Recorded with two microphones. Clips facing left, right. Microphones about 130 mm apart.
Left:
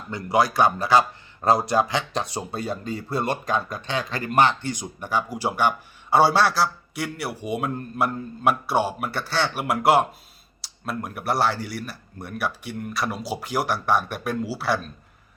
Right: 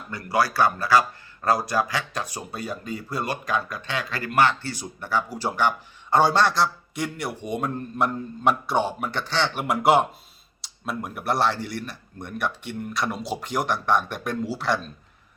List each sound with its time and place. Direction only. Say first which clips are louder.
0.1 s a man's voice: left 2 dB; 20° left (ahead or behind); by 14.8 s 5° left (ahead or behind)